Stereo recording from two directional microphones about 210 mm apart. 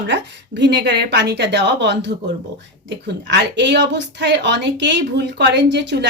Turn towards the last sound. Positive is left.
turn(degrees=-55)  # may be behind; listen again after turning